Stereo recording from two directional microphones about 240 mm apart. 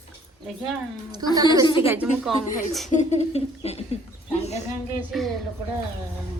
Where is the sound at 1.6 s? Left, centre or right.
Left.